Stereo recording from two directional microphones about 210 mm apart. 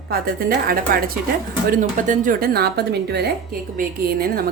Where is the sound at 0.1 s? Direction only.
45° right (ahead or behind).